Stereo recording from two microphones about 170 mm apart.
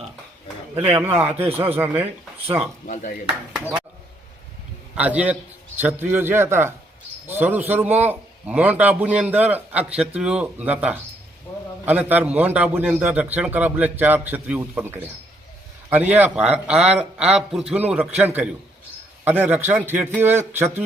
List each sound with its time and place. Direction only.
1.0 s a man's voice: 10° right (ahead or behind)
2.8 s speech: 50° left (ahead or behind)
3.5 s a man's voice: 10° right (ahead or behind)
4.9 s a man's voice: 10° right (ahead or behind)
19.2 s a man's voice: 10° right (ahead or behind)